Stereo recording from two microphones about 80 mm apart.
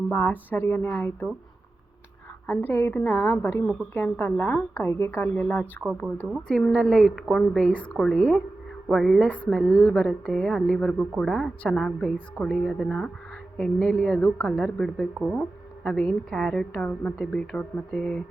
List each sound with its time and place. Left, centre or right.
0.1 s a woman's voice: left
2.5 s a woman's voice: left
6.5 s a woman's voice: centre
7.7 s a woman's voice: centre
7.9 s a woman's voice: centre